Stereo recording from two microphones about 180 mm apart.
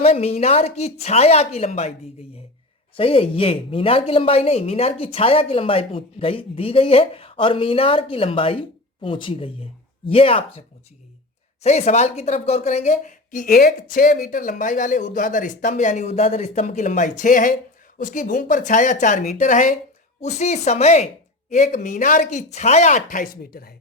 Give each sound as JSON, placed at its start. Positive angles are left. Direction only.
{"t": 0.0, "sound": "a woman's voice", "side_deg": 35}
{"t": 2.9, "sound": "a woman's voice", "side_deg": 30}
{"t": 11.6, "sound": "a woman's voice", "side_deg": 35}